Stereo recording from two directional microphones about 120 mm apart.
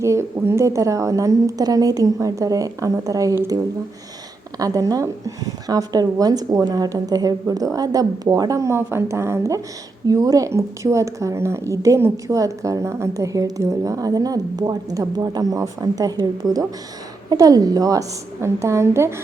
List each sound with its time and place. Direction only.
0.0 s a woman's voice: 25° right (ahead or behind)